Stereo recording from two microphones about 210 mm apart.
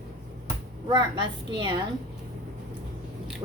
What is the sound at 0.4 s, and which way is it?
Speech, 20° right (ahead or behind).